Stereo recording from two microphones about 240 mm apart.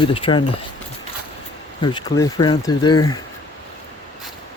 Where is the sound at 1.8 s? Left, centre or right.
Centre.